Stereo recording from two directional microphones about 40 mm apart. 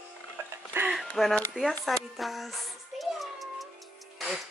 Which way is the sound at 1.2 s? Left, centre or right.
Centre.